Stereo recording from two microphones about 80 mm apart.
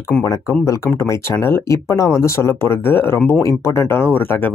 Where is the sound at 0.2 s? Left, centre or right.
Left.